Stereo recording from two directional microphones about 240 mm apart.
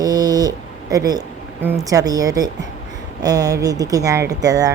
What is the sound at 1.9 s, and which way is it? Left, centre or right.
A woman's voice, centre.